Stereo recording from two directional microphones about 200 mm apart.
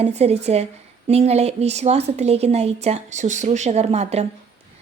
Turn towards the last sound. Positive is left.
turn(degrees=-30)  # may be behind; listen again after turning